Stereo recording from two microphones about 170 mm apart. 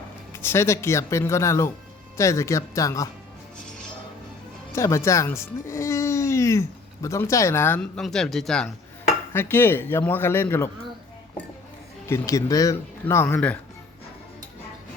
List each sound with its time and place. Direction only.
0.3 s speech: 15° left (ahead or behind)
4.7 s speech: 15° left (ahead or behind)
9.3 s speech: 15° left (ahead or behind)
12.0 s speech: 15° left (ahead or behind)